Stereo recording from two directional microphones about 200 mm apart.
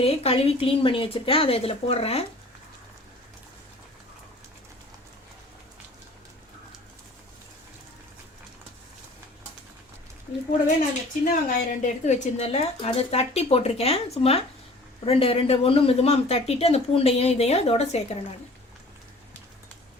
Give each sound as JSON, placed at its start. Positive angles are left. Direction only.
{"t": 0.0, "sound": "a woman's voice", "side_deg": 30}
{"t": 11.3, "sound": "speech", "side_deg": 40}